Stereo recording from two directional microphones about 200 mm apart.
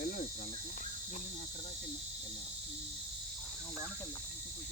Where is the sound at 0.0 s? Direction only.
45° left (ahead or behind).